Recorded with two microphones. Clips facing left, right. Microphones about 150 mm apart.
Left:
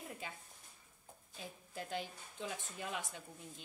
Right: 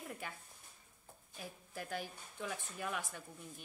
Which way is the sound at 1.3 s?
25° left (ahead or behind).